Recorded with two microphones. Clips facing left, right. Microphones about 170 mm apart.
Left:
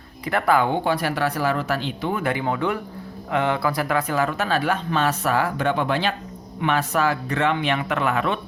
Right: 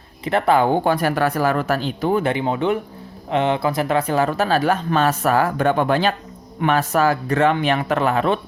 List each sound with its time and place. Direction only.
0.3 s speech: 25° right (ahead or behind)
0.7 s speech: 45° right (ahead or behind)
2.2 s speech: 20° right (ahead or behind)